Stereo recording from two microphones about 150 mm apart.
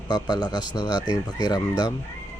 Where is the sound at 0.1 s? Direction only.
25° left (ahead or behind).